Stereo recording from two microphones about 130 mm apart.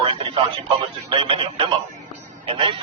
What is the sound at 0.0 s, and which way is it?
Radio, 40° right (ahead or behind).